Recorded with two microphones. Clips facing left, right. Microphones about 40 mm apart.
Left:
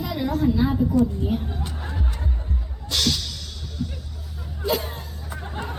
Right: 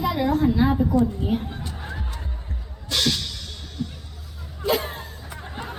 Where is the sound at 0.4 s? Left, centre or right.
Centre.